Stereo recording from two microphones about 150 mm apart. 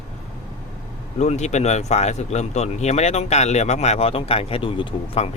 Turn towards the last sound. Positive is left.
turn(degrees=40)  # may be behind; listen again after turning